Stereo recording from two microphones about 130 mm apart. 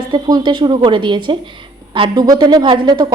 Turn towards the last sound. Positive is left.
turn(degrees=-30)  # may be behind; listen again after turning